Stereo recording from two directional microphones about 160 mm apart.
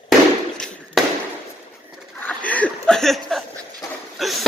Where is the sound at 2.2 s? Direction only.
10° left (ahead or behind).